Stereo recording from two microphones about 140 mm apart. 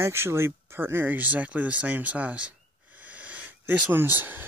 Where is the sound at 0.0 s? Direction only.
20° right (ahead or behind).